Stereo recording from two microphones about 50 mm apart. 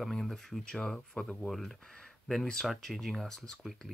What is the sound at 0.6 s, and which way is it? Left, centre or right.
Speech, centre.